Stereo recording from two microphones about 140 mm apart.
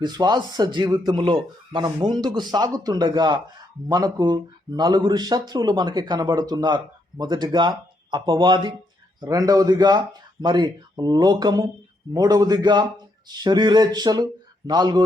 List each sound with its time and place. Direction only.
0.0 s speech: 30° right (ahead or behind)